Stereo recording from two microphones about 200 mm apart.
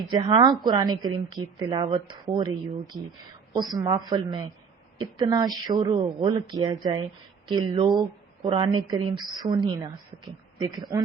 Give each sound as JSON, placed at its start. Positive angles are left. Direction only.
{"t": 0.1, "sound": "a woman's voice", "side_deg": -25}
{"t": 10.9, "sound": "speech", "side_deg": -15}